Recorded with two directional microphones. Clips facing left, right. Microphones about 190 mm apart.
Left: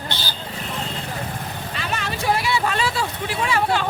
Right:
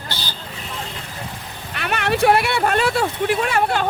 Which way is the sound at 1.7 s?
65° right (ahead or behind).